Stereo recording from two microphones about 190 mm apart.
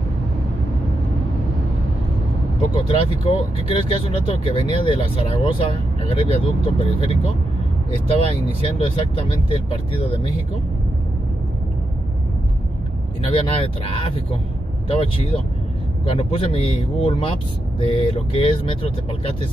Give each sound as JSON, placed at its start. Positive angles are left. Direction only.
{"t": 3.3, "sound": "speech", "side_deg": 30}
{"t": 13.3, "sound": "speech", "side_deg": 30}